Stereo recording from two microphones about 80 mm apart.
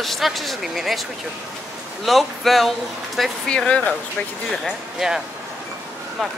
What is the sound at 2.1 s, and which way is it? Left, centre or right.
Speech, centre.